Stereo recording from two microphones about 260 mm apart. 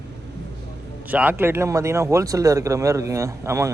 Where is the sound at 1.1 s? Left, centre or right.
Centre.